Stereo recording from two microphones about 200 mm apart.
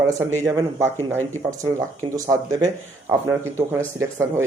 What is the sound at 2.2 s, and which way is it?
Speech, 15° right (ahead or behind).